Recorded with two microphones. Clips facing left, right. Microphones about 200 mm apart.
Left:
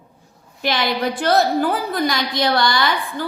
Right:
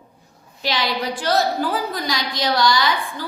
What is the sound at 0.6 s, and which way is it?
A woman's voice, 55° left (ahead or behind).